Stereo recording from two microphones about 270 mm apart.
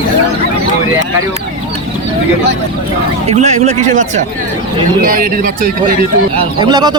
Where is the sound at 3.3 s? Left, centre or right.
Right.